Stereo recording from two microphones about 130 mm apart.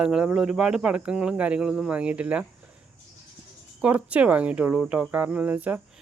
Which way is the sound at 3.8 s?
10° right (ahead or behind).